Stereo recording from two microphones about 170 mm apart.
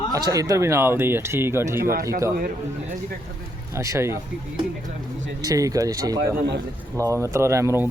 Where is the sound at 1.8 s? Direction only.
60° right (ahead or behind).